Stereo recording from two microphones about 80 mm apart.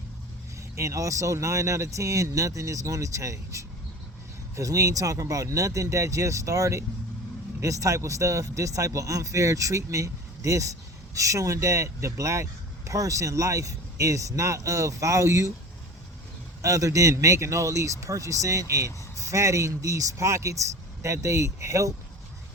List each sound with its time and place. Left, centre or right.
0.8 s speech: right
16.6 s speech: right